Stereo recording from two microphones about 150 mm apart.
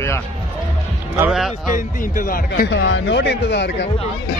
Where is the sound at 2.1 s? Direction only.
65° left (ahead or behind).